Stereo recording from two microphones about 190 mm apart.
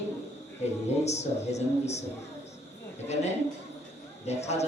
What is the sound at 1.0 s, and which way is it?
Speech, 35° left (ahead or behind).